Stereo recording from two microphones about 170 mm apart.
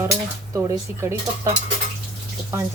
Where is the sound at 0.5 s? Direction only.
15° right (ahead or behind).